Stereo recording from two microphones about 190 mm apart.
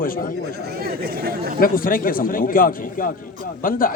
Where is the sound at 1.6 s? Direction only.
50° left (ahead or behind).